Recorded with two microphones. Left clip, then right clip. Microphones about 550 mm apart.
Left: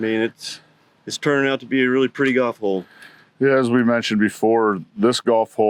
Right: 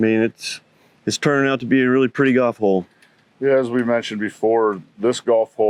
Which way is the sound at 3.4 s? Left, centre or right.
Left.